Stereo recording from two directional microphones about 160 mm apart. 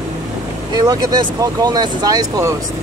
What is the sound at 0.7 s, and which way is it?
Speech, 25° right (ahead or behind).